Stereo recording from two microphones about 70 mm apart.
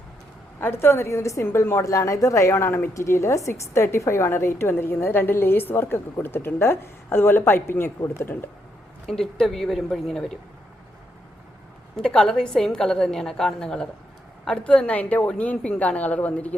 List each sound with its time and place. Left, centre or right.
0.6 s a woman's voice: left
1.8 s a woman's voice: left
9.0 s speech: centre
11.9 s a woman's voice: centre